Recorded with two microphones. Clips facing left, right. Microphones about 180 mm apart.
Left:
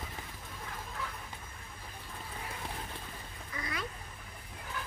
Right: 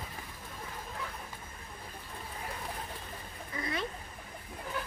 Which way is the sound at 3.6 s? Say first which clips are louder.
Right 4 dB; 25° right (ahead or behind).